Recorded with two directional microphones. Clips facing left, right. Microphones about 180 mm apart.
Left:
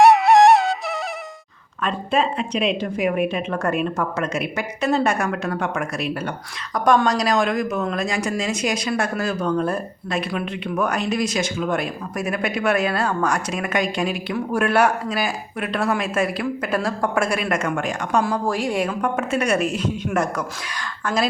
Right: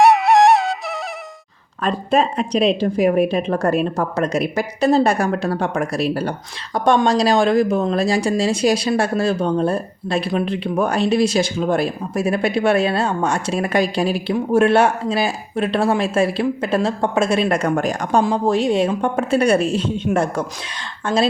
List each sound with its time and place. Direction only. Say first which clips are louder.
0.0 s music: even; centre (ahead or behind)
1.8 s a woman's voice: right 4 dB; 40° right (ahead or behind)
18.2 s speech: right 5 dB; 20° right (ahead or behind)